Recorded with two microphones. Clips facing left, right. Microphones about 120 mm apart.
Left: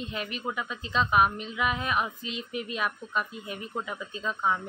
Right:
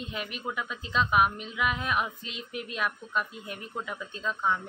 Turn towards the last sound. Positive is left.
turn(degrees=5)  # may be behind; listen again after turning